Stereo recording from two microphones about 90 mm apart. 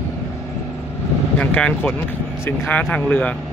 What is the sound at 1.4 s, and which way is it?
Speech, 15° left (ahead or behind).